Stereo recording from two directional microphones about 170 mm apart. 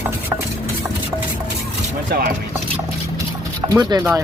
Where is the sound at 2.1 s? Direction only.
55° right (ahead or behind).